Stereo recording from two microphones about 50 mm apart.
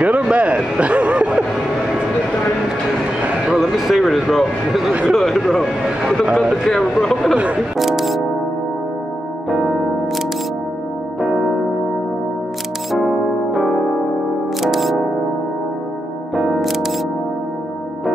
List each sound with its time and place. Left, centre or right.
0.0 s a sound: right
3.5 s speech: centre
7.7 s music: centre
12.9 s music: centre
16.3 s music: centre